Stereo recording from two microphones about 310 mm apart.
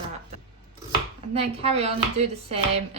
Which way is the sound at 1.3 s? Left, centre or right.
Centre.